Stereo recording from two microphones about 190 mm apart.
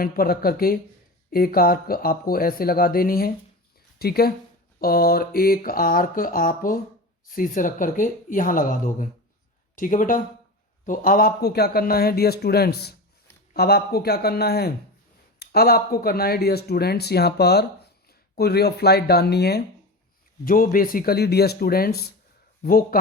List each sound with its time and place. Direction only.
0.0 s speech: 50° left (ahead or behind)